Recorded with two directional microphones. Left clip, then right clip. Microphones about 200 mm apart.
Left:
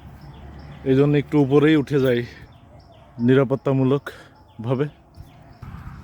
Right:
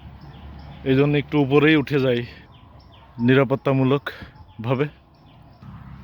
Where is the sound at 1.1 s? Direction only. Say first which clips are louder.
Left 1 dB; 15° left (ahead or behind).